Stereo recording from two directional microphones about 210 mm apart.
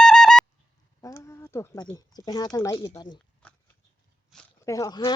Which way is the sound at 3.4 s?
5° left (ahead or behind).